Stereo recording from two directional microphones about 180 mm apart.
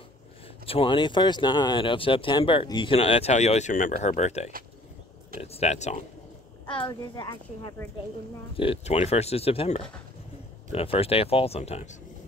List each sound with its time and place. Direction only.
0.7 s speech: 30° left (ahead or behind)
6.7 s speech: 25° left (ahead or behind)
8.5 s speech: 35° left (ahead or behind)